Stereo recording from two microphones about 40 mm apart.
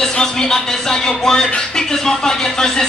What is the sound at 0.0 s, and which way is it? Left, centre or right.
Speech, centre.